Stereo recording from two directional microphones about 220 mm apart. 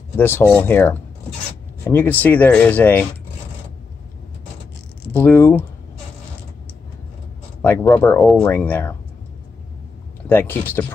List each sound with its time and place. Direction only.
0.2 s speech: 10° left (ahead or behind)
5.1 s speech: 10° left (ahead or behind)
7.6 s speech: 10° left (ahead or behind)
10.2 s speech: 10° left (ahead or behind)